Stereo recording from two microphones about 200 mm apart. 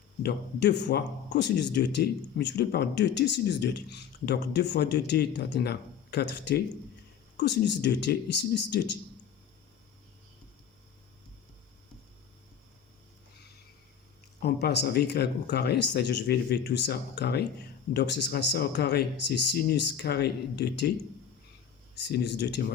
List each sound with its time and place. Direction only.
0.2 s speech: 55° left (ahead or behind)
14.4 s speech: 55° left (ahead or behind)
21.9 s speech: 60° left (ahead or behind)